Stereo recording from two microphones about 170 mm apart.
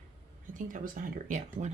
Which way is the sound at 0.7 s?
50° right (ahead or behind).